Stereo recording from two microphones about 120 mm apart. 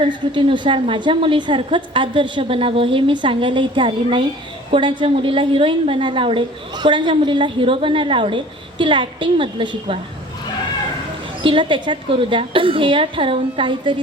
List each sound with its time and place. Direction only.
0.0 s a woman's voice: 45° right (ahead or behind)
11.4 s a woman's voice: 40° right (ahead or behind)